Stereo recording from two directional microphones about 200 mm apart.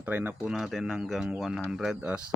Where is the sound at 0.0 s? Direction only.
10° right (ahead or behind).